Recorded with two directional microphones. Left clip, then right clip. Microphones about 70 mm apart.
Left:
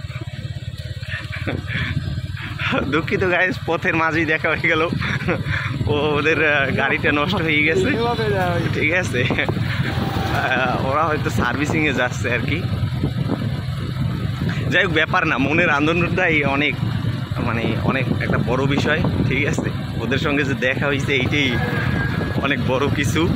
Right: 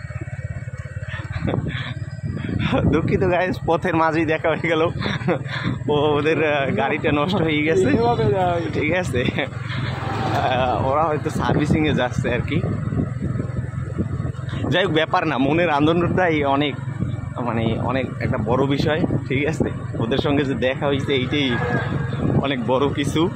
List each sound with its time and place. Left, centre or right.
2.6 s speech: right
3.6 s speech: right
5.9 s speech: right
6.1 s speech: right
7.3 s speech: right
8.7 s speech: right
10.9 s speech: right
14.7 s speech: right
15.1 s speech: right
20.8 s speech: right